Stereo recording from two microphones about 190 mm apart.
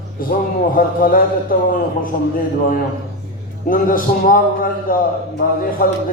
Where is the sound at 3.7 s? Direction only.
45° left (ahead or behind).